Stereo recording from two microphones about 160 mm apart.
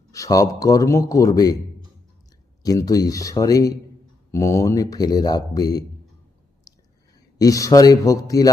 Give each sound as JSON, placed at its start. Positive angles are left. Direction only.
{"t": 0.1, "sound": "speech", "side_deg": 20}
{"t": 2.6, "sound": "speech", "side_deg": 20}
{"t": 7.3, "sound": "speech", "side_deg": 20}